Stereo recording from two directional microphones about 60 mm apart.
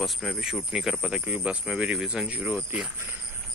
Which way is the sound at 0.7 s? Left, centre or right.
Centre.